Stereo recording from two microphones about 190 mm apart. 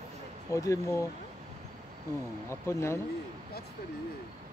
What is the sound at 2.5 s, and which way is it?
Speech, 15° left (ahead or behind).